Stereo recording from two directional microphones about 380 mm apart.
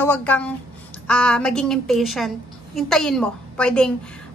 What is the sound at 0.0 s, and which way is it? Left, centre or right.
A woman's voice, centre.